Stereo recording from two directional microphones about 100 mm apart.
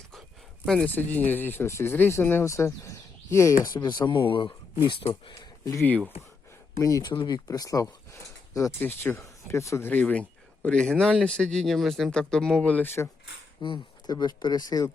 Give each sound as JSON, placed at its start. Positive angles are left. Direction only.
{"t": 0.1, "sound": "a sound", "side_deg": 0}
{"t": 0.9, "sound": "speech", "side_deg": 20}
{"t": 3.8, "sound": "speech", "side_deg": 45}
{"t": 6.7, "sound": "speech", "side_deg": 35}
{"t": 7.1, "sound": "speech", "side_deg": 50}
{"t": 7.4, "sound": "speech", "side_deg": 35}
{"t": 8.8, "sound": "speech", "side_deg": 25}
{"t": 9.9, "sound": "speech", "side_deg": 15}
{"t": 13.6, "sound": "speech", "side_deg": 50}